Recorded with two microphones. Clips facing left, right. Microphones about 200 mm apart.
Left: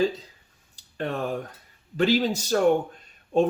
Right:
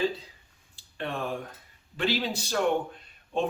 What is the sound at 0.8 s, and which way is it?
Speech, 40° left (ahead or behind).